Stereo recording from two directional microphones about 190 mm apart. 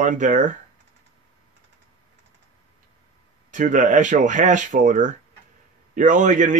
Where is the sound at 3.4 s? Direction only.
45° right (ahead or behind).